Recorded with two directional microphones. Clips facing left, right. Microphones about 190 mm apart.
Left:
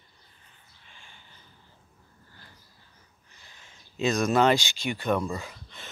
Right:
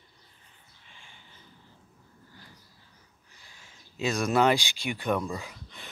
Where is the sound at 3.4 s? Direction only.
10° right (ahead or behind).